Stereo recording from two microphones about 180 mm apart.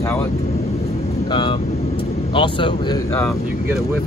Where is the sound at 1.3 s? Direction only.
25° left (ahead or behind).